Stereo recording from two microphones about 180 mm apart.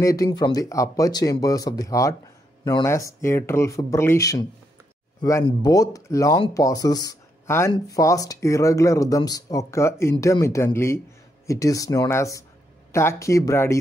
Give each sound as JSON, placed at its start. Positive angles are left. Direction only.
{"t": 0.0, "sound": "speech", "side_deg": 20}